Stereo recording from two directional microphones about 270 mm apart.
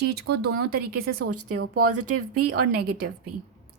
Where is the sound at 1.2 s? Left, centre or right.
Right.